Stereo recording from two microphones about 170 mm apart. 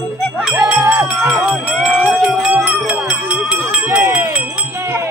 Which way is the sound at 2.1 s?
5° right (ahead or behind).